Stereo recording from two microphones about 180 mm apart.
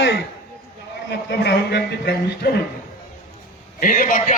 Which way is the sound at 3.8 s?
50° left (ahead or behind).